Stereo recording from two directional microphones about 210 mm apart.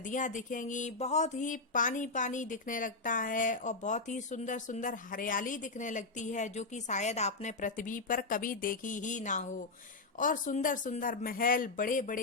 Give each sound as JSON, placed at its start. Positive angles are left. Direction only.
{"t": 0.1, "sound": "speech", "side_deg": 35}